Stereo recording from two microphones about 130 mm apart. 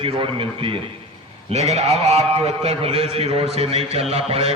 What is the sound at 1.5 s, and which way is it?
A man's voice, 55° right (ahead or behind).